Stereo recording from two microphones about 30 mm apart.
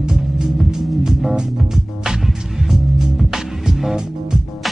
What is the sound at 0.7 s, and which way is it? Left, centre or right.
Music, centre.